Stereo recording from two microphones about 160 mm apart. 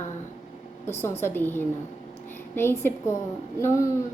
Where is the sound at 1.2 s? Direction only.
10° left (ahead or behind).